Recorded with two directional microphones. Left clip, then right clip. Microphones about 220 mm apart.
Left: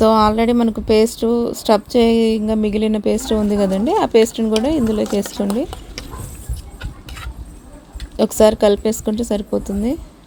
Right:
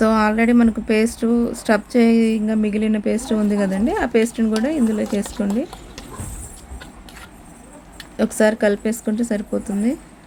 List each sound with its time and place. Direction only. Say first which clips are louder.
0.0 s speech: left 4 dB; 15° left (ahead or behind)
8.1 s speech: left 5 dB; 20° left (ahead or behind)